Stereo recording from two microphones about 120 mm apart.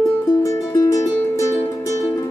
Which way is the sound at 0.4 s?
25° left (ahead or behind).